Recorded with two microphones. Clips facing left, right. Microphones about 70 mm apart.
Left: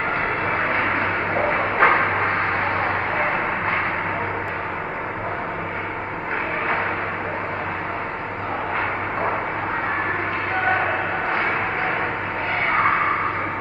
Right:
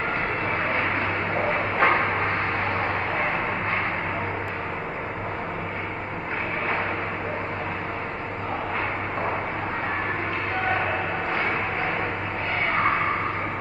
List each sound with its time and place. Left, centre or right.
1.6 s dog: left